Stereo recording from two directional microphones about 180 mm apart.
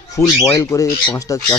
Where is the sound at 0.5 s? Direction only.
20° left (ahead or behind).